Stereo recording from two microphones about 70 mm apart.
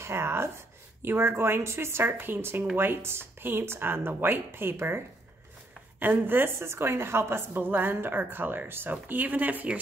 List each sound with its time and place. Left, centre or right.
0.0 s a woman's voice: right